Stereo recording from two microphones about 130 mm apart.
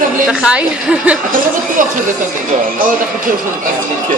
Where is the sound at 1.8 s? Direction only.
90° right.